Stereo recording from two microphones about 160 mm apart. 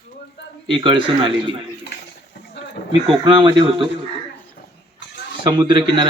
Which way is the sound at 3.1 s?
30° right (ahead or behind).